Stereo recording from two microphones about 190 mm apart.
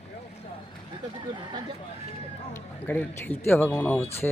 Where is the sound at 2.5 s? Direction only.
10° left (ahead or behind).